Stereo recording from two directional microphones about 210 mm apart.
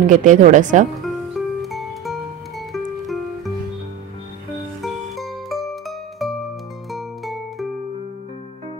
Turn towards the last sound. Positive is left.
turn(degrees=0)  # may be behind; listen again after turning